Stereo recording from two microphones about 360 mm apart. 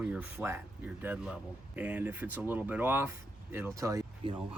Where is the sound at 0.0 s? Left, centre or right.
Centre.